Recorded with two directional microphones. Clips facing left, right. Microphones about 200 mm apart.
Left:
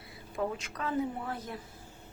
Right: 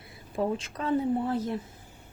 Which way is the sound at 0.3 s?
30° right (ahead or behind).